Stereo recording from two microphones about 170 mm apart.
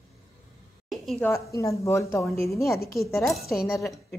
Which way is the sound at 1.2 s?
15° left (ahead or behind).